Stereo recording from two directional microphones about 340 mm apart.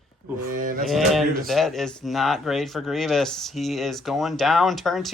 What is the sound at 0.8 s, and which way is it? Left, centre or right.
Speech, centre.